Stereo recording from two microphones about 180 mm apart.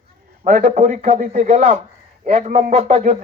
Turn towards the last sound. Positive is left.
turn(degrees=-40)  # may be behind; listen again after turning